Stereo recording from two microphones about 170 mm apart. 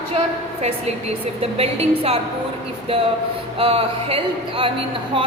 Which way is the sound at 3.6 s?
35° right (ahead or behind).